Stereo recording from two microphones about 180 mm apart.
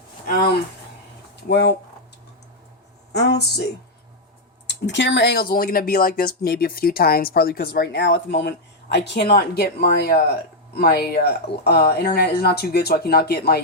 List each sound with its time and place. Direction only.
1.5 s speech: 65° left (ahead or behind)
3.1 s speech: 70° left (ahead or behind)
4.6 s speech: 75° left (ahead or behind)